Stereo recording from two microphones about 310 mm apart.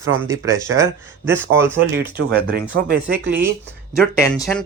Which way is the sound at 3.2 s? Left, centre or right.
Centre.